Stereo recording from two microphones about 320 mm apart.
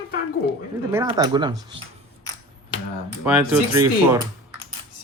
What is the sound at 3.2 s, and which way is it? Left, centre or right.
Speech, centre.